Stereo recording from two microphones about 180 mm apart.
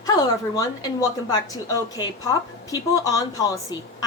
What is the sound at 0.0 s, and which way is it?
A woman's voice, 20° left (ahead or behind).